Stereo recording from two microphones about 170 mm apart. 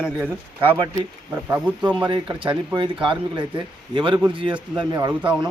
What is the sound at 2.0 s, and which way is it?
Speech, 25° right (ahead or behind).